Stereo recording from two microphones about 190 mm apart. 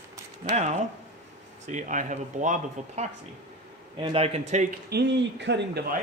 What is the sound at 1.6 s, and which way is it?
Speech, 40° right (ahead or behind).